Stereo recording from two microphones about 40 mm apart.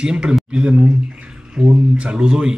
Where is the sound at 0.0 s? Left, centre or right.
Right.